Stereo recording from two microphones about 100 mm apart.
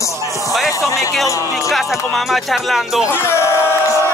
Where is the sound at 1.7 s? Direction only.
Centre (ahead or behind).